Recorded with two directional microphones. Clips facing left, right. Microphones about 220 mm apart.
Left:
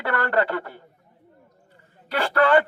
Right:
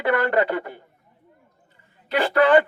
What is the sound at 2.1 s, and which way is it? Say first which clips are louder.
Speech: right 2 dB; 15° right (ahead or behind).